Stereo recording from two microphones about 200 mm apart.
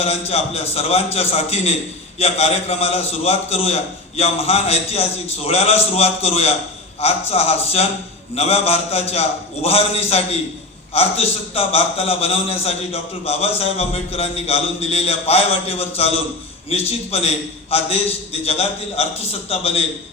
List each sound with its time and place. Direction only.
0.0 s a man's voice: 30° left (ahead or behind)